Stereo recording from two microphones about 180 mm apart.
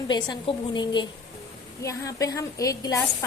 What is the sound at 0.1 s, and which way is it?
A woman's voice, 25° left (ahead or behind).